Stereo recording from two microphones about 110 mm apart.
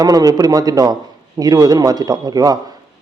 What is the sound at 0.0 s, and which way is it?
Speech, 35° right (ahead or behind).